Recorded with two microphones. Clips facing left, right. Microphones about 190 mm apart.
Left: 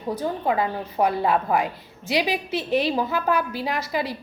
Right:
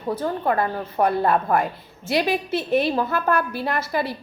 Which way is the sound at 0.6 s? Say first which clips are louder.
Right 1 dB; 55° right (ahead or behind).